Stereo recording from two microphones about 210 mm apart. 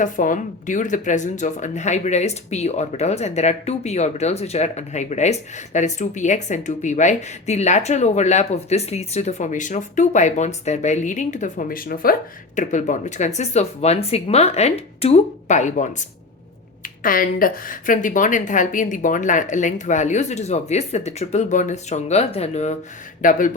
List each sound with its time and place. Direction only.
0.0 s speech: 40° left (ahead or behind)